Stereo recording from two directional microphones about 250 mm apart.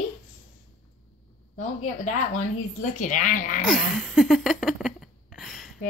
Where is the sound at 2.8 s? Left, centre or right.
Left.